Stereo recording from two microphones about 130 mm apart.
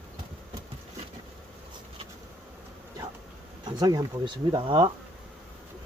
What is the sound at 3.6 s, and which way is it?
Speech, 30° right (ahead or behind).